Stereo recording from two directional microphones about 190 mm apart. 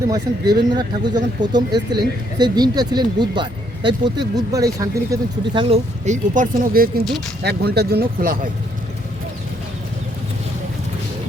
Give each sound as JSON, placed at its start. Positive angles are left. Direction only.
{"t": 0.1, "sound": "speech", "side_deg": -20}